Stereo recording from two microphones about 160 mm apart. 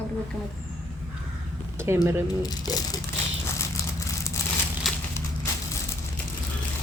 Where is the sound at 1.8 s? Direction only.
15° right (ahead or behind).